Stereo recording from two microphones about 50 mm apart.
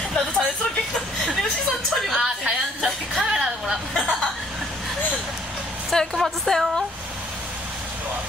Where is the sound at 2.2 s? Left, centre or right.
Centre.